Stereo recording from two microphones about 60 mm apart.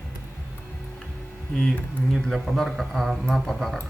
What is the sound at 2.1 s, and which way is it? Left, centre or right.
Music, centre.